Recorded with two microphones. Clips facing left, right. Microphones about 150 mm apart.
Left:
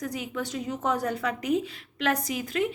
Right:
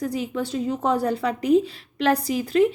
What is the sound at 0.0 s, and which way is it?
A woman's voice, 30° right (ahead or behind).